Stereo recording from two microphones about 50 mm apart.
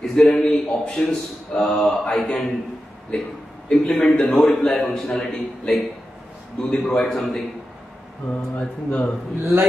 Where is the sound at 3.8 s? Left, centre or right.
Left.